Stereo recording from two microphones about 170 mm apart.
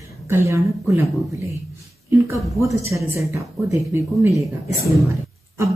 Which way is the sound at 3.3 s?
15° right (ahead or behind).